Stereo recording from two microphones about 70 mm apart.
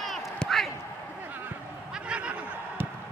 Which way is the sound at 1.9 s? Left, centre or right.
Centre.